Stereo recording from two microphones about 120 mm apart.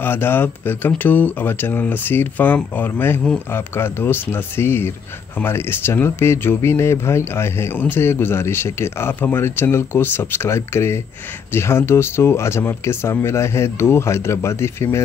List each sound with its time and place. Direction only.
0.0 s speech: 20° left (ahead or behind)